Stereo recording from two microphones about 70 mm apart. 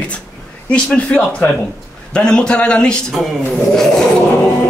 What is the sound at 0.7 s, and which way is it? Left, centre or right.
Speech, centre.